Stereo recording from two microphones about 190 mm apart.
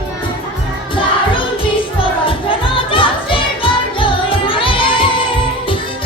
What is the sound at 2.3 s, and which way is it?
Music, 25° left (ahead or behind).